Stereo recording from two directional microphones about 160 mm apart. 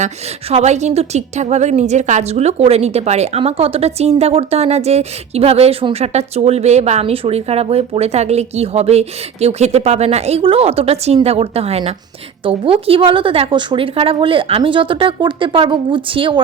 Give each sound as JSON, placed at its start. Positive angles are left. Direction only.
{"t": 0.5, "sound": "a woman's voice", "side_deg": -45}